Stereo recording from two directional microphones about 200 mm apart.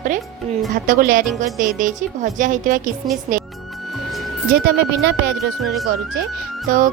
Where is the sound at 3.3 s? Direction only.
40° right (ahead or behind).